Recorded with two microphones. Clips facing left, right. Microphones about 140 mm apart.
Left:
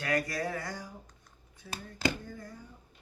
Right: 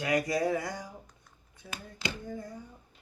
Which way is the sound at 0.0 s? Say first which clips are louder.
Right 4 dB; 20° right (ahead or behind).